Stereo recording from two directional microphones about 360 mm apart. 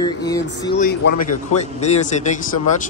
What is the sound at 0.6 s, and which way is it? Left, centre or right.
A man's voice, left.